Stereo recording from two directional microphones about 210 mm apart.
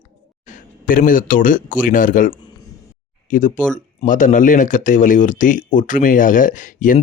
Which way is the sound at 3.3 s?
40° left (ahead or behind).